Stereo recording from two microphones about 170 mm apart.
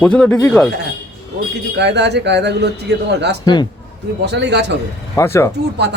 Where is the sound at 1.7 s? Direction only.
90° right.